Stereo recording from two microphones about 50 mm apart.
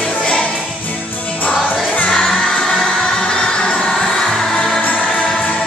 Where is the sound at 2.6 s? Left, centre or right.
Centre.